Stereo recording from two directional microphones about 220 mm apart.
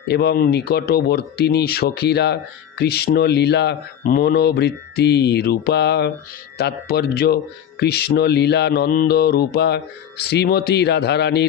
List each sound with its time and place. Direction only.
0.1 s speech: 45° left (ahead or behind)